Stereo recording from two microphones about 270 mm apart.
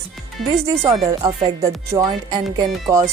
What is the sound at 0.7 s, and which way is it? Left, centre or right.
Speech, centre.